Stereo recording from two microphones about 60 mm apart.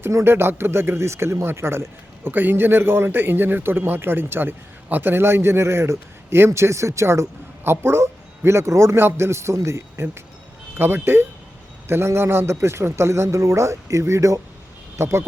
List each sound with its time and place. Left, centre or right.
0.3 s speech: right
2.3 s a man's voice: right
14.9 s speech: right